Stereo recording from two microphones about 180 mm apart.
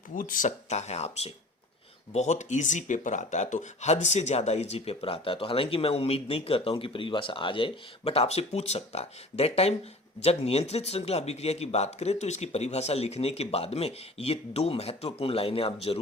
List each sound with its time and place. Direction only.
0.1 s speech: 45° left (ahead or behind)